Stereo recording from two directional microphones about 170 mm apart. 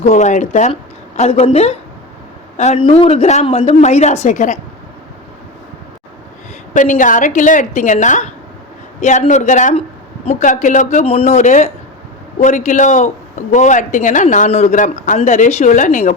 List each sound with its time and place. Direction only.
0.0 s a man's voice: 45° left (ahead or behind)
0.7 s a sound: 35° left (ahead or behind)
2.7 s a woman's voice: 30° left (ahead or behind)
6.7 s a man's voice: 50° left (ahead or behind)
11.0 s a woman's voice: 35° left (ahead or behind)